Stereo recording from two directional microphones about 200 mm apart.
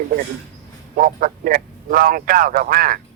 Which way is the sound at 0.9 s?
45° right (ahead or behind).